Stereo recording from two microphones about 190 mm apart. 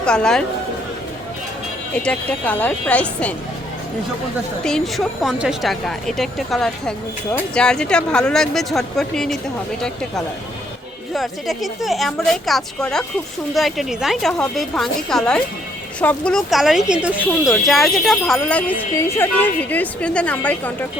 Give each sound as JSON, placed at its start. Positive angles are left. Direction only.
{"t": 0.0, "sound": "speech", "side_deg": 5}
{"t": 2.0, "sound": "speech", "side_deg": 5}
{"t": 4.6, "sound": "speech", "side_deg": 0}
{"t": 11.1, "sound": "speech", "side_deg": 0}